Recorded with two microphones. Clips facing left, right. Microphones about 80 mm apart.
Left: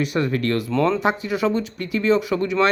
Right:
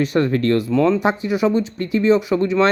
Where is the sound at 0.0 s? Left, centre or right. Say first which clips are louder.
Right 4 dB; right.